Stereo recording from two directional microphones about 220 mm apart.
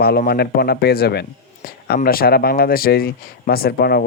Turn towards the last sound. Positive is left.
turn(degrees=45)  # may be behind; listen again after turning